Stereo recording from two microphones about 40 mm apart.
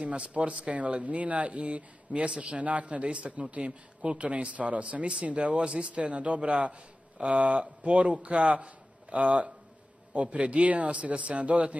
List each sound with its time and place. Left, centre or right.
0.0 s speech: right